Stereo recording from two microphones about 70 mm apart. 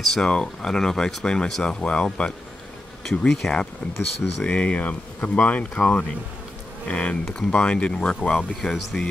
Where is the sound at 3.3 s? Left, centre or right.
Centre.